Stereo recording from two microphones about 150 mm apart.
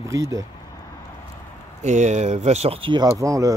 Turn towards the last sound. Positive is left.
turn(degrees=-20)  # may be behind; listen again after turning